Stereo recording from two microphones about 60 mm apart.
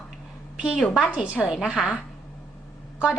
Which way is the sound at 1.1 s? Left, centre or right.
Centre.